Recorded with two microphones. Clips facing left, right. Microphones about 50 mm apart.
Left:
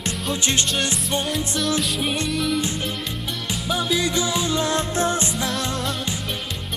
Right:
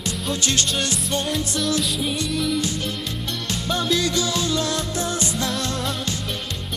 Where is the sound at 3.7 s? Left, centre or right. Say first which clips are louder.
Even; centre; by 5.3 s left.